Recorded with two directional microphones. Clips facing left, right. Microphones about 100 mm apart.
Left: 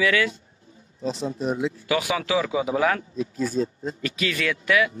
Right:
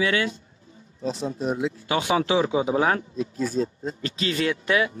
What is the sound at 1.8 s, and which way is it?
Speech, 30° right (ahead or behind).